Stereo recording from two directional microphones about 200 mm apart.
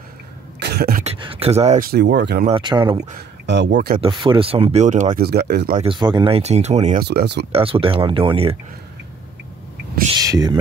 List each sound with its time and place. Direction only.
0.6 s beatboxing: 55° right (ahead or behind)
1.0 s a sound: 25° right (ahead or behind)
1.9 s speech: 55° right (ahead or behind)
2.4 s speech: 25° right (ahead or behind)
3.4 s speech: 60° right (ahead or behind)
4.0 s speech: 25° right (ahead or behind)
5.2 s speech: 55° right (ahead or behind)
5.8 s speech: 25° right (ahead or behind)
7.1 s speech: 55° right (ahead or behind)
7.5 s speech: 30° right (ahead or behind)
10.1 s speech: 20° right (ahead or behind)